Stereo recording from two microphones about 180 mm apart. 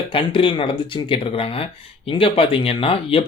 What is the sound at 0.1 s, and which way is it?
Speech, 30° left (ahead or behind).